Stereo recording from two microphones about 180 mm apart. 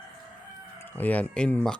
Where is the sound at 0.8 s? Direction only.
10° left (ahead or behind).